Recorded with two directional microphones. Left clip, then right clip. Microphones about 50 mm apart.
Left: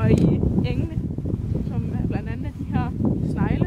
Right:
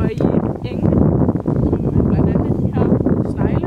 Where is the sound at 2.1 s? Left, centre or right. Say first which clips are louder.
Right 13 dB; centre.